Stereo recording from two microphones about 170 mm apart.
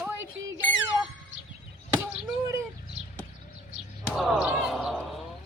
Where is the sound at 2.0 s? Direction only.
15° right (ahead or behind).